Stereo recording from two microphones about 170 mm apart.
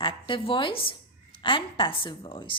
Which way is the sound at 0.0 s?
30° left (ahead or behind).